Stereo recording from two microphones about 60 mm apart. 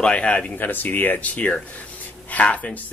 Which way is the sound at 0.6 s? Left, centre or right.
Left.